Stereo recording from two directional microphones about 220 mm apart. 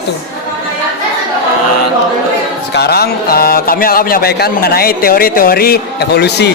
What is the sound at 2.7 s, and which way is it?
A man's voice, 45° left (ahead or behind).